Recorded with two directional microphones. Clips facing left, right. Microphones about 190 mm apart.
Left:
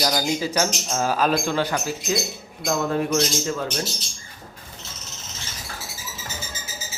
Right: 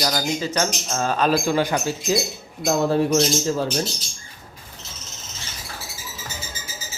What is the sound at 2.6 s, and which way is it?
Speech, 30° right (ahead or behind).